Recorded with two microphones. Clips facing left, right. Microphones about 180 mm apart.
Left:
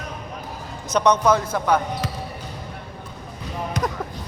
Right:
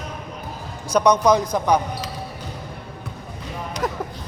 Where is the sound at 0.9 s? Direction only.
10° right (ahead or behind).